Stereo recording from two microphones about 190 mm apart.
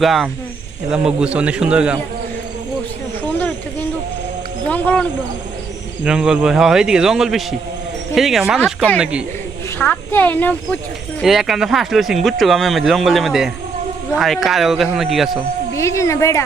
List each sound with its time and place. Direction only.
0.0 s speech: centre (ahead or behind)
4.7 s speech: 10° left (ahead or behind)
6.1 s speech: 5° right (ahead or behind)
9.7 s speech: 10° left (ahead or behind)
15.7 s speech: 15° left (ahead or behind)